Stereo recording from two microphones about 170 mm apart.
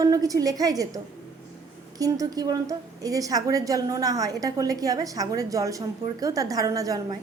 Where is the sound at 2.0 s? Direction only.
20° right (ahead or behind).